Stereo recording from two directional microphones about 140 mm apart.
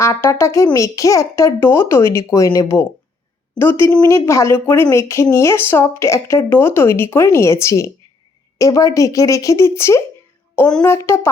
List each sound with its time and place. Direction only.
0.0 s a woman's voice: 20° left (ahead or behind)